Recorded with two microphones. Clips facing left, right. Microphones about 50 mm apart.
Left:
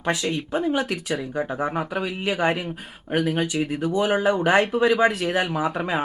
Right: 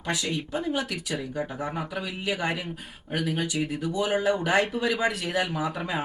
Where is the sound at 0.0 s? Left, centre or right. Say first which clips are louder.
Left 5 dB; left.